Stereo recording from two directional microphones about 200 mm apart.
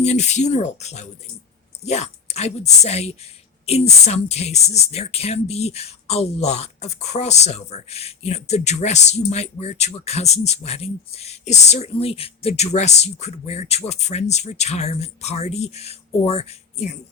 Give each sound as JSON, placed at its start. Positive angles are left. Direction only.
{"t": 0.0, "sound": "speech", "side_deg": 35}